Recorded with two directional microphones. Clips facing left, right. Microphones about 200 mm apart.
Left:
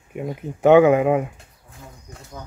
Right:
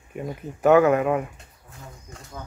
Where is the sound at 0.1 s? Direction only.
15° left (ahead or behind).